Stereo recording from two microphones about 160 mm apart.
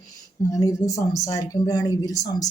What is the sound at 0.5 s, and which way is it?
Speech, 20° left (ahead or behind).